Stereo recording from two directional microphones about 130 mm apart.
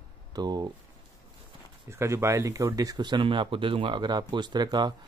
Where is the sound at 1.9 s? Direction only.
20° right (ahead or behind).